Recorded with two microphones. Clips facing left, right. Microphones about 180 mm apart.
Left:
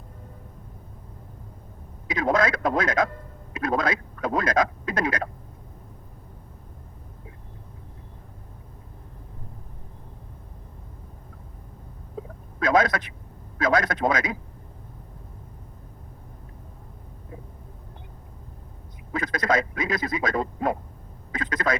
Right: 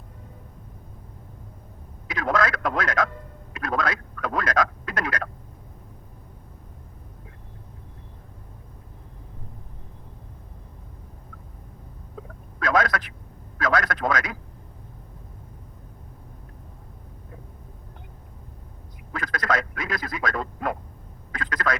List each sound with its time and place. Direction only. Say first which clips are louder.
2.0 s speech: left 2 dB; 20° left (ahead or behind)
12.5 s a man's voice: left 2 dB; 20° left (ahead or behind)
19.1 s a man's voice: left 2 dB; 20° left (ahead or behind)